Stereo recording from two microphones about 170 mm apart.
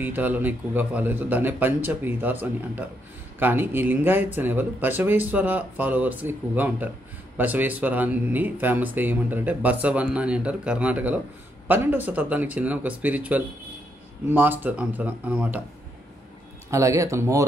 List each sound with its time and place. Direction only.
0.0 s speech: 10° right (ahead or behind)
16.7 s speech: 15° right (ahead or behind)